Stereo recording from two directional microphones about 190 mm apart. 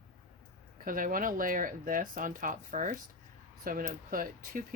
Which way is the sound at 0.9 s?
45° right (ahead or behind).